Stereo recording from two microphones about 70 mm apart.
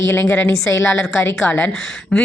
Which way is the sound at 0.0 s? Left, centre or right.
Left.